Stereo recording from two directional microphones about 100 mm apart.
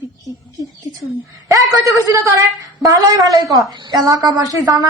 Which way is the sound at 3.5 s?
40° right (ahead or behind).